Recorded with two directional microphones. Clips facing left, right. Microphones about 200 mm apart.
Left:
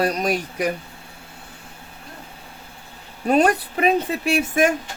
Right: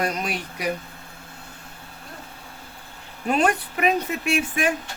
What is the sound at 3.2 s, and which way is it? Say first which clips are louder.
Speech: left 4 dB; 40° left (ahead or behind).